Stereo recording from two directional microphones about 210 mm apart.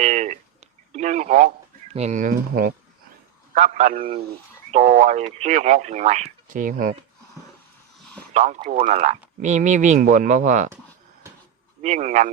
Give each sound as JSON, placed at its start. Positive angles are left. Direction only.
{"t": 0.0, "sound": "speech", "side_deg": -35}
{"t": 8.3, "sound": "speech", "side_deg": -35}
{"t": 11.8, "sound": "speech", "side_deg": -35}